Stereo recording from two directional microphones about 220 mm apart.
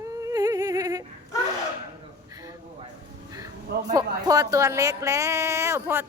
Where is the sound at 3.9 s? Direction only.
15° right (ahead or behind).